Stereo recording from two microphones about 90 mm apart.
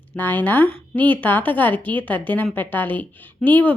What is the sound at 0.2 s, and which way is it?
A woman's voice, 20° left (ahead or behind).